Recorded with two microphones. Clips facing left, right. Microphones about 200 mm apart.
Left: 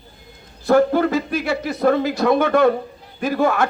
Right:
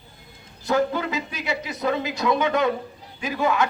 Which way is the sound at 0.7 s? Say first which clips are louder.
Left 8 dB; 50° left (ahead or behind).